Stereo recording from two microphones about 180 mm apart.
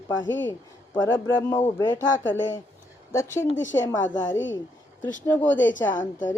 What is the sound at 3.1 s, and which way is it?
A man's voice, 15° left (ahead or behind).